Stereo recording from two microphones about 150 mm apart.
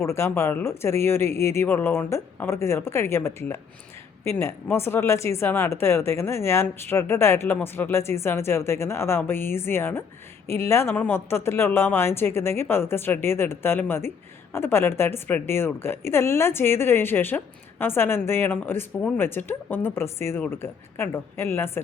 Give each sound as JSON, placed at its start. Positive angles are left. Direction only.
{"t": 0.0, "sound": "a woman's voice", "side_deg": 15}